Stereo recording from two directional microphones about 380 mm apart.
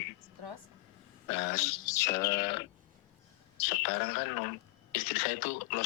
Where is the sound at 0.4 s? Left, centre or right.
Right.